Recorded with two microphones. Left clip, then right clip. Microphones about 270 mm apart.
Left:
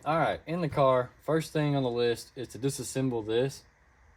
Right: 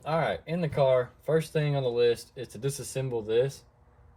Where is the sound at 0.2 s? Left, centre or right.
Left.